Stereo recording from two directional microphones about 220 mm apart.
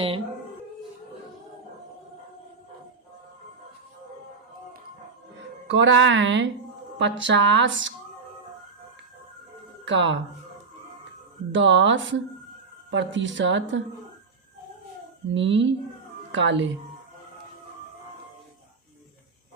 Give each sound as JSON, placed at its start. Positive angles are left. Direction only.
{"t": 5.6, "sound": "speech", "side_deg": -55}
{"t": 9.8, "sound": "speech", "side_deg": -55}
{"t": 11.5, "sound": "speech", "side_deg": -55}
{"t": 15.3, "sound": "speech", "side_deg": -55}